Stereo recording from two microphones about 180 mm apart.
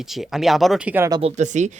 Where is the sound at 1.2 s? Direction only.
40° right (ahead or behind).